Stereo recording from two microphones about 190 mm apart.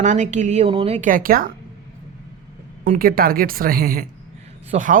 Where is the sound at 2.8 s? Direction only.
50° right (ahead or behind).